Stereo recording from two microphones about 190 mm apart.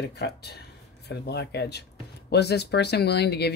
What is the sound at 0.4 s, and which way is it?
Speech, 60° left (ahead or behind).